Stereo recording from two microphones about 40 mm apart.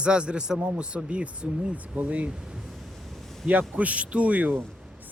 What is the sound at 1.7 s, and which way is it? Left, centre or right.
Speech, right.